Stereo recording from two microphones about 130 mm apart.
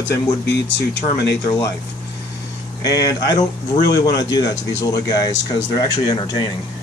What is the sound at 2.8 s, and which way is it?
Speech, 30° left (ahead or behind).